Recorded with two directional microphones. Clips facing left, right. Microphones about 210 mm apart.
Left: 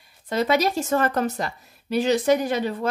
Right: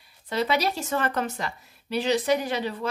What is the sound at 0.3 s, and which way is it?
Speech, 45° left (ahead or behind).